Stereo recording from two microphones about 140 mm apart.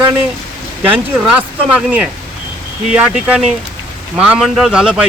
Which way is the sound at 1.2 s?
5° right (ahead or behind).